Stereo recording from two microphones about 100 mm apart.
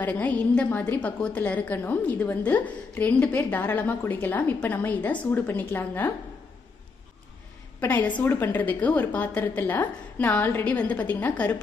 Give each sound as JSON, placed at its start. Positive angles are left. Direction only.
{"t": 0.0, "sound": "a woman's voice", "side_deg": 15}
{"t": 7.8, "sound": "a woman's voice", "side_deg": 20}